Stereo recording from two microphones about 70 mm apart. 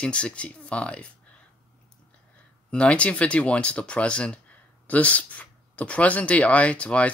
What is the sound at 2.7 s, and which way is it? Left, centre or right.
Speech, centre.